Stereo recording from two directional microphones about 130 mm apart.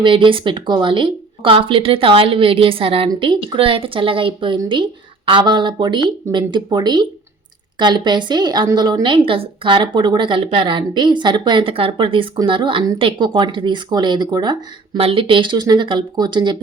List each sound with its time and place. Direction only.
0.0 s a woman's voice: 40° right (ahead or behind)
14.9 s a woman's voice: 45° right (ahead or behind)